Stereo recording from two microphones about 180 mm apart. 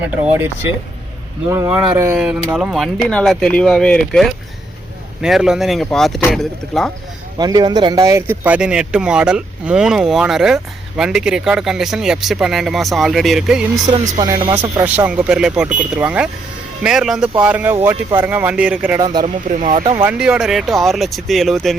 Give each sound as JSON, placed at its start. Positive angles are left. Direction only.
{"t": 1.5, "sound": "speech", "side_deg": -15}
{"t": 7.3, "sound": "speech", "side_deg": -25}
{"t": 14.1, "sound": "speech", "side_deg": -20}
{"t": 14.5, "sound": "speech", "side_deg": -10}
{"t": 18.9, "sound": "speech", "side_deg": -25}
{"t": 19.2, "sound": "speech", "side_deg": -45}
{"t": 20.0, "sound": "speech", "side_deg": -5}